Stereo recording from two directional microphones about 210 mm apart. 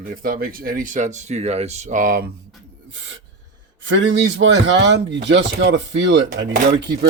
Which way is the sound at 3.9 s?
60° right (ahead or behind).